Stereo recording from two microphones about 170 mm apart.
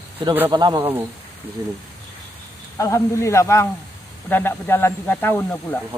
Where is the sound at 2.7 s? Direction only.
15° left (ahead or behind).